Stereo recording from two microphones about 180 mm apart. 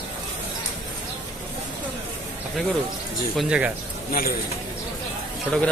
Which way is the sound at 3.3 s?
5° right (ahead or behind).